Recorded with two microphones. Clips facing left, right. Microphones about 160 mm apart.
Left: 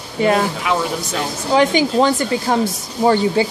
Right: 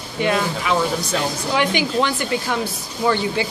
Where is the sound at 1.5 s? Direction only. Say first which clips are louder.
Left 7 dB; 35° left (ahead or behind).